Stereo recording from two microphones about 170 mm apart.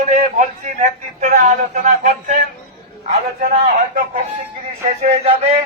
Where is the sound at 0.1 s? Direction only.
45° right (ahead or behind).